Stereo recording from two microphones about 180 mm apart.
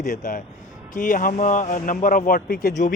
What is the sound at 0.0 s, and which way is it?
Speech, 40° left (ahead or behind).